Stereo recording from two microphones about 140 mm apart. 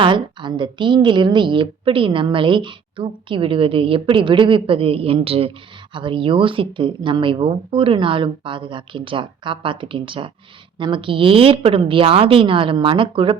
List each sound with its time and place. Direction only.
0.0 s a woman's voice: 35° right (ahead or behind)